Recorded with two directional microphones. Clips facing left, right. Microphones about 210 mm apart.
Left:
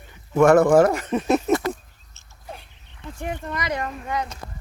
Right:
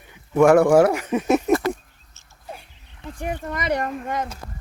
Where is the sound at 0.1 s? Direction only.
10° right (ahead or behind).